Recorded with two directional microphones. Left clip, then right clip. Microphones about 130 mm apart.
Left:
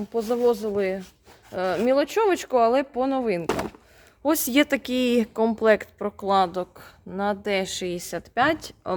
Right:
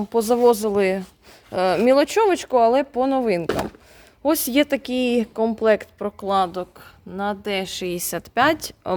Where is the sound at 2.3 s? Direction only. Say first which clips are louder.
Right 3 dB; 20° right (ahead or behind).